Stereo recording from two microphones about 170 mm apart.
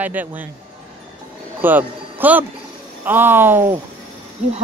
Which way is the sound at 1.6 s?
10° right (ahead or behind).